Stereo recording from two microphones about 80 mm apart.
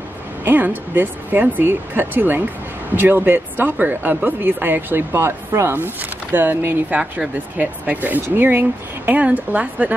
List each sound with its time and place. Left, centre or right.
0.5 s speech: right